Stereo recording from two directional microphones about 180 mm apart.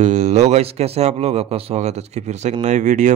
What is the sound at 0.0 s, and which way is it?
A man's voice, 40° right (ahead or behind).